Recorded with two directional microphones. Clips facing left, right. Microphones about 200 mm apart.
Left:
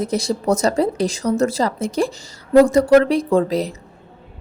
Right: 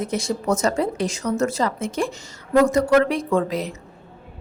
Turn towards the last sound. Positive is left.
turn(degrees=35)  # may be behind; listen again after turning